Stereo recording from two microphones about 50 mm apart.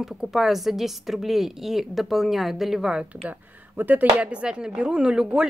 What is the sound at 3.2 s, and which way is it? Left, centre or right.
Speech, right.